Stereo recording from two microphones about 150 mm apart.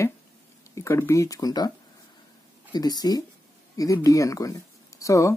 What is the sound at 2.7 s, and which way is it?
Speech, 25° left (ahead or behind).